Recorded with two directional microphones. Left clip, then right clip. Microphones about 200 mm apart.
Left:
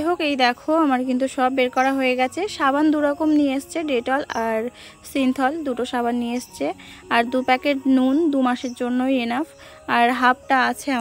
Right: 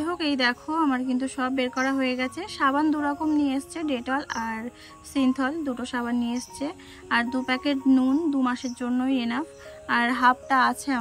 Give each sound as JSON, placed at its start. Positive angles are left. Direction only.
{"t": 0.0, "sound": "a woman's voice", "side_deg": 20}